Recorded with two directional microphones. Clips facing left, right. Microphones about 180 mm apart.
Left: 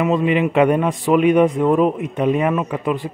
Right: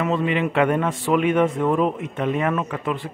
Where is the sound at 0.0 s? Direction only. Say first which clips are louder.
Left 5 dB; 15° left (ahead or behind).